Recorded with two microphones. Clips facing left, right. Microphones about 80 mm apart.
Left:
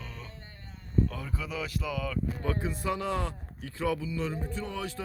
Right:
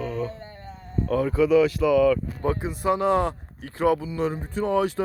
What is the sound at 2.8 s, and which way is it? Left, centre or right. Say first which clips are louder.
Mantra: right 12 dB; right.